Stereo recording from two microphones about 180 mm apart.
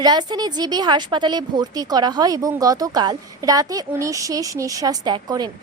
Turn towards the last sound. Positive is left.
turn(degrees=-25)  # may be behind; listen again after turning